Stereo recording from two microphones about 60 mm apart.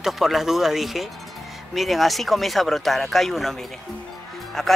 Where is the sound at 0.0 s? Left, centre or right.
Centre.